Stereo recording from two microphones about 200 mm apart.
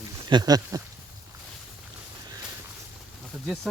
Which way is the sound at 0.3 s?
20° right (ahead or behind).